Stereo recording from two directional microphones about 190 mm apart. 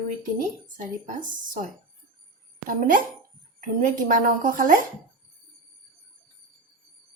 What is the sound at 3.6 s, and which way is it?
Speech, 45° right (ahead or behind).